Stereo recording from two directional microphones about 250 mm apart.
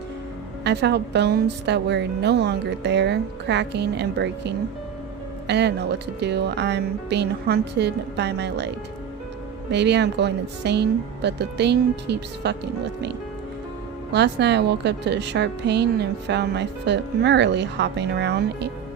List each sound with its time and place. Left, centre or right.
0.6 s a woman's voice: right
9.7 s a woman's voice: right